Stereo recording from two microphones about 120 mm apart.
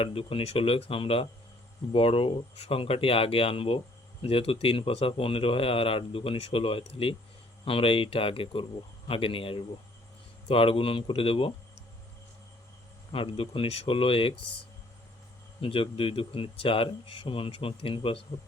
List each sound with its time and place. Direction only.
0.0 s speech: 50° left (ahead or behind)
13.1 s speech: 50° left (ahead or behind)
15.6 s speech: 50° left (ahead or behind)